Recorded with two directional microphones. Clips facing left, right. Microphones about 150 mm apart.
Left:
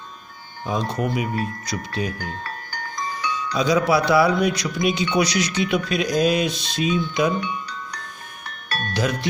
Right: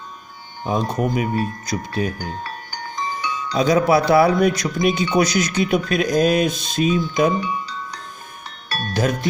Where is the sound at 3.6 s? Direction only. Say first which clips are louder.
Right 3 dB; 50° right (ahead or behind).